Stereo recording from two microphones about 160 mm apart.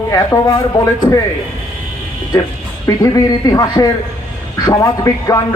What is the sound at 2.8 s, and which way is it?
Speech, 20° left (ahead or behind).